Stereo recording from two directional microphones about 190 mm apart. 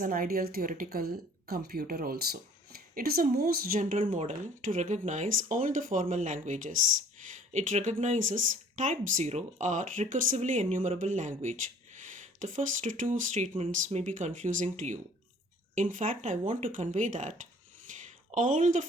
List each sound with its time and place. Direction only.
0.0 s speech: 50° right (ahead or behind)